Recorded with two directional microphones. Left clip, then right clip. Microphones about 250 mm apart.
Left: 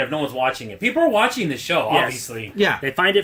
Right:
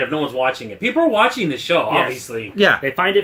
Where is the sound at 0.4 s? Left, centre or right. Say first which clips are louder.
Right 1 dB; left.